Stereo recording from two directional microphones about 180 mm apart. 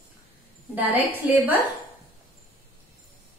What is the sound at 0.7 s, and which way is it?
Speech, 10° right (ahead or behind).